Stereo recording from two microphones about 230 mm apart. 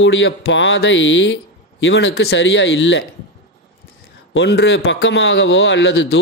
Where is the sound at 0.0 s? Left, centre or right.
Left.